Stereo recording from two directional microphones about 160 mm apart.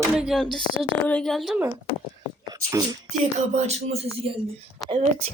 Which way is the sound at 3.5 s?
40° right (ahead or behind).